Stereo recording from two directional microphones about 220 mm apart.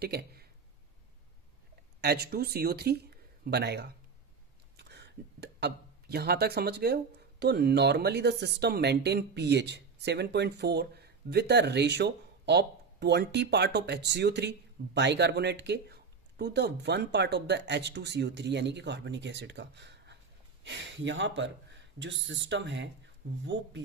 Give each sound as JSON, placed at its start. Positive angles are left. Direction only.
{"t": 0.0, "sound": "speech", "side_deg": -45}
{"t": 2.0, "sound": "speech", "side_deg": -45}